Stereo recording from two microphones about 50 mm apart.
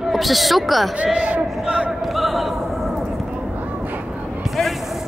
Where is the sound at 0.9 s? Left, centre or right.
Right.